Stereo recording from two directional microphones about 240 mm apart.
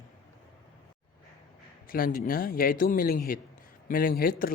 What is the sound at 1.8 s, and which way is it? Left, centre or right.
A man's voice, left.